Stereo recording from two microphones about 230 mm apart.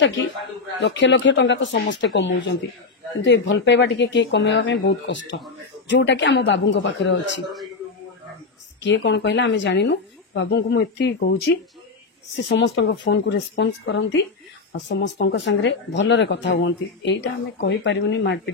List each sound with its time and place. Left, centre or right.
0.7 s speech: left
8.8 s speech: left
12.4 s speech: left